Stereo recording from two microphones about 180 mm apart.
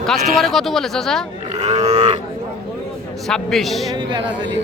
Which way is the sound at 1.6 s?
40° right (ahead or behind).